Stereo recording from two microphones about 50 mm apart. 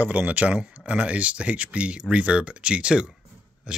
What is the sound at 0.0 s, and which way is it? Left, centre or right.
Speech, right.